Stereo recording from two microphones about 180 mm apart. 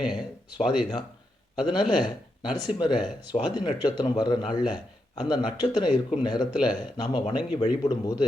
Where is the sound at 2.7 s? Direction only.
25° left (ahead or behind).